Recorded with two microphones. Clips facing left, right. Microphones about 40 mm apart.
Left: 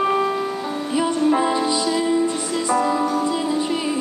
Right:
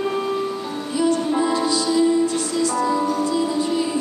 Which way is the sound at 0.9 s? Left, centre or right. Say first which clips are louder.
Left 1 dB; left.